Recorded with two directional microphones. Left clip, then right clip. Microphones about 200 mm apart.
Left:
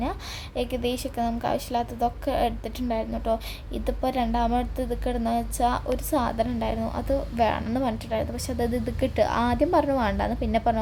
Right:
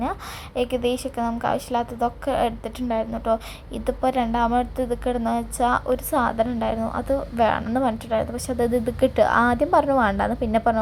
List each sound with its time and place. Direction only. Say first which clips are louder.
0.0 s a woman's voice: right 3 dB; 5° right (ahead or behind)